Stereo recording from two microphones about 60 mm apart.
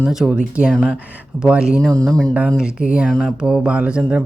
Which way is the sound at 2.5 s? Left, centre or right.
Centre.